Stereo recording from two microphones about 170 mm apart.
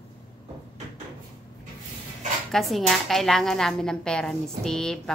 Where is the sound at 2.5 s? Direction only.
Centre (ahead or behind).